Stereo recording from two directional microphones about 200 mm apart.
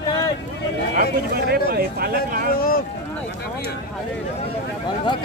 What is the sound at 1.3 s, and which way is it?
Speech, 50° right (ahead or behind).